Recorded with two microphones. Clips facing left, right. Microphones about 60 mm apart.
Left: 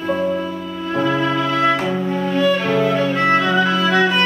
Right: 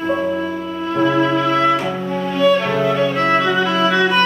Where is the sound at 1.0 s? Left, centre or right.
Right.